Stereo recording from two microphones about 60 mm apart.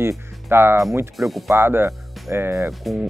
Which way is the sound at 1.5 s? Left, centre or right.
Right.